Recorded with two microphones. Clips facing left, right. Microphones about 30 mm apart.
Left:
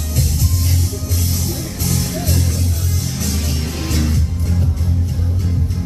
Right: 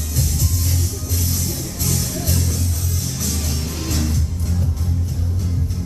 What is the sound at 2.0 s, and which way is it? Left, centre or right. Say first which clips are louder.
Music: left 3 dB; left.